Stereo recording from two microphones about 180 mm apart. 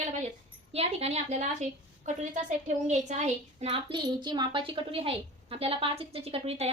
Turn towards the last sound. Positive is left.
turn(degrees=-35)  # may be behind; listen again after turning